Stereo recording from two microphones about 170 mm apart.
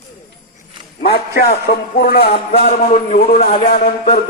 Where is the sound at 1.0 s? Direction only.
65° left (ahead or behind).